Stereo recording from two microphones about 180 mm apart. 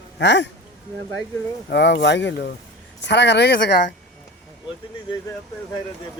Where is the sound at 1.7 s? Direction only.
75° left (ahead or behind).